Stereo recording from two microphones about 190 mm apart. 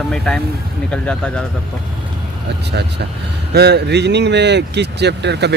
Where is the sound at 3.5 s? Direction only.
60° right (ahead or behind).